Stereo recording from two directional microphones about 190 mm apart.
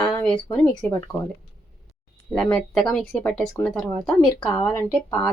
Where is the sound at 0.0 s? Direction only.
5° left (ahead or behind).